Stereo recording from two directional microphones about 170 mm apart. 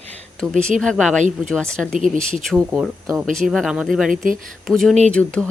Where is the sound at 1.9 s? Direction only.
50° right (ahead or behind).